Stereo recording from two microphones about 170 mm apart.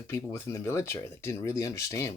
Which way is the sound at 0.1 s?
15° left (ahead or behind).